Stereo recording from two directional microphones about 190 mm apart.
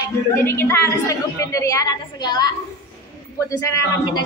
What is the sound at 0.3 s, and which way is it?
A woman's voice, 15° left (ahead or behind).